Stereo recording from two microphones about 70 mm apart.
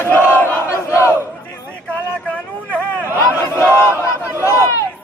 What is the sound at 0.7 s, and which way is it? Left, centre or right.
Battle cry, left.